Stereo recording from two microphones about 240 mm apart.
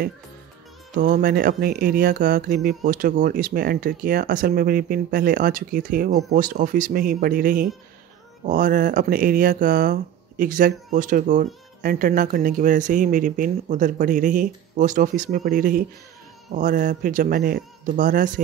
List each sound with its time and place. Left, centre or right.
0.9 s speech: right